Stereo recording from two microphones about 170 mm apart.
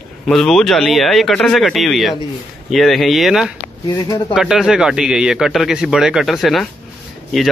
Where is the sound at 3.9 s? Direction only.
25° left (ahead or behind).